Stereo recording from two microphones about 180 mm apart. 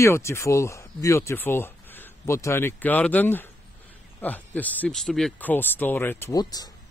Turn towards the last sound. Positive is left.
turn(degrees=20)  # may be behind; listen again after turning